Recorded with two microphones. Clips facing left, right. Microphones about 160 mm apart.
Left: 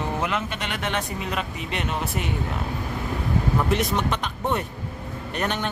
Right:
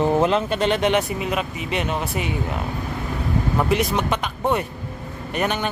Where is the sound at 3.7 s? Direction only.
Centre (ahead or behind).